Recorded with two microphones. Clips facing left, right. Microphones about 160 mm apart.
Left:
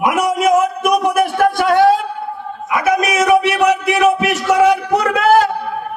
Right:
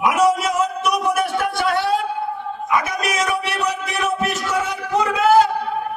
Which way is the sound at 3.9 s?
65° left (ahead or behind).